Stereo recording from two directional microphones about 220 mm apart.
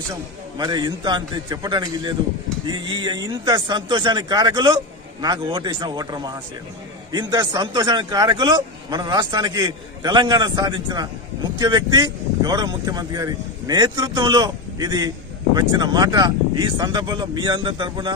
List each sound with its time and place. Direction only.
0.1 s speech: 15° right (ahead or behind)